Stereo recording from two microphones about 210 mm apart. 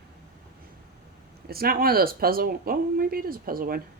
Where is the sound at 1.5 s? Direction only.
45° right (ahead or behind).